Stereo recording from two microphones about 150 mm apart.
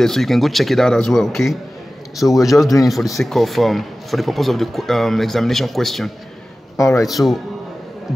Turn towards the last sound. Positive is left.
turn(degrees=0)  # may be behind; listen again after turning